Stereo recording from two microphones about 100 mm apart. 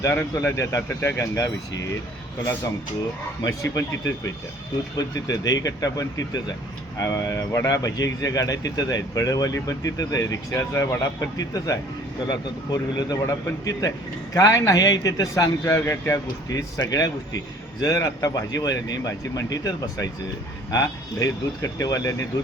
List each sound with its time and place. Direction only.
0.4 s speech: 35° left (ahead or behind)
3.4 s speech: 35° left (ahead or behind)